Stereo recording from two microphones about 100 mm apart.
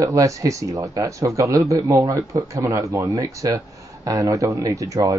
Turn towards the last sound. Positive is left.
turn(degrees=-35)  # may be behind; listen again after turning